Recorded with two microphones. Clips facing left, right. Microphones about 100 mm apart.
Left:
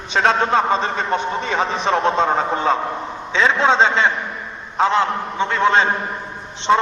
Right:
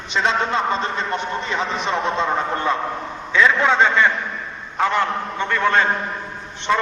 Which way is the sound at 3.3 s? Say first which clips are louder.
Even; 25° left (ahead or behind).